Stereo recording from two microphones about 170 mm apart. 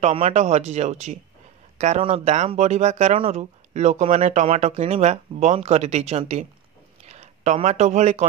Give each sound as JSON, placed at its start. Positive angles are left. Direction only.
{"t": 0.0, "sound": "speech", "side_deg": -40}